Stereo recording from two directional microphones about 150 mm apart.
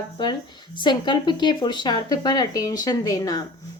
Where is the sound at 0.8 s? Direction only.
30° left (ahead or behind).